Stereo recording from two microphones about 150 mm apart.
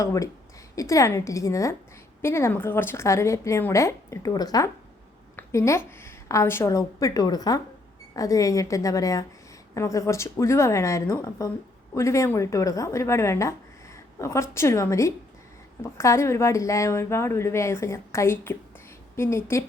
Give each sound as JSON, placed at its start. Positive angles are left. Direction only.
{"t": 0.0, "sound": "a woman's voice", "side_deg": 20}